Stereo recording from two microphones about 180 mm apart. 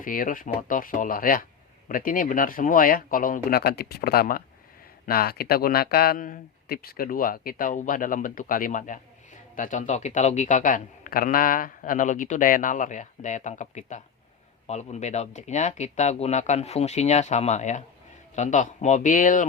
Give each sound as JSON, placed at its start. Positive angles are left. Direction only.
{"t": 0.0, "sound": "speech", "side_deg": 50}